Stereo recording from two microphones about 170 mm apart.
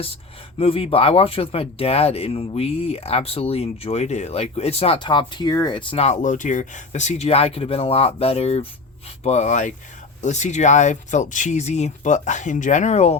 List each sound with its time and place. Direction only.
0.6 s speech: 35° left (ahead or behind)